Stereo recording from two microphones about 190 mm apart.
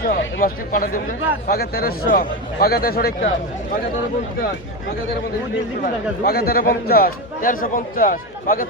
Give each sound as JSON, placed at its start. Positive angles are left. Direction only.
{"t": 0.0, "sound": "speech", "side_deg": 50}
{"t": 5.8, "sound": "speech", "side_deg": 55}